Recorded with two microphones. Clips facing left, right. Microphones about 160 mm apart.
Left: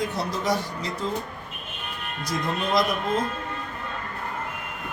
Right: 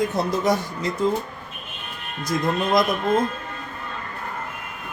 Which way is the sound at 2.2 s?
50° right (ahead or behind).